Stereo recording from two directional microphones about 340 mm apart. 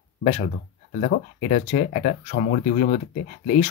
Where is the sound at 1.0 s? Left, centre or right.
Left.